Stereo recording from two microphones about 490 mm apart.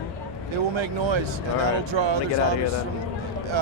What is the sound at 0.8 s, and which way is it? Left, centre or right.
Speech, right.